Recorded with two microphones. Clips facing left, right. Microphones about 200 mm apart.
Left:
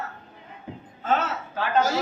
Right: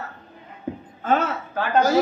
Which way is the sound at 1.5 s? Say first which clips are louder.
Right 3 dB; 55° right (ahead or behind).